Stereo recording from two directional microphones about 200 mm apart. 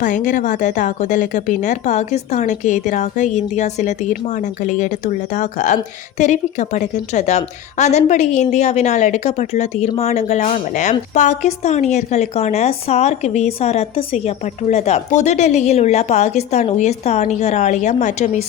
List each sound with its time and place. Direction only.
0.0 s a woman's voice: 40° left (ahead or behind)